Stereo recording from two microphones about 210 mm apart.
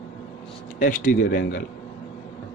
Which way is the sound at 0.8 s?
40° left (ahead or behind).